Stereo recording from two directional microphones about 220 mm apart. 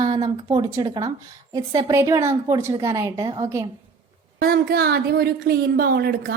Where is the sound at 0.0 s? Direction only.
20° right (ahead or behind).